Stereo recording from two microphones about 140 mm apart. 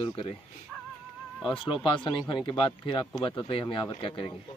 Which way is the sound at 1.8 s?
35° left (ahead or behind).